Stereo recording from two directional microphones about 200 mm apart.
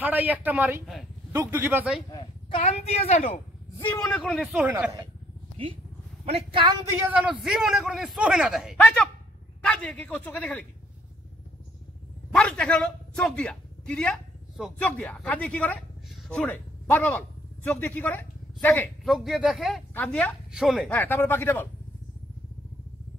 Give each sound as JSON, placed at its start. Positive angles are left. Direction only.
{"t": 0.0, "sound": "a man's voice", "side_deg": -10}
{"t": 2.0, "sound": "speech", "side_deg": 25}
{"t": 3.8, "sound": "a man's voice", "side_deg": 5}
{"t": 6.2, "sound": "a man's voice", "side_deg": -25}
{"t": 7.1, "sound": "a man's voice", "side_deg": -5}
{"t": 12.4, "sound": "a woman's voice", "side_deg": 5}
{"t": 19.1, "sound": "a man's voice", "side_deg": 0}
{"t": 20.9, "sound": "speech", "side_deg": 10}